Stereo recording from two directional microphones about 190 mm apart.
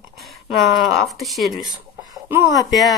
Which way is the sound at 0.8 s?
Centre (ahead or behind).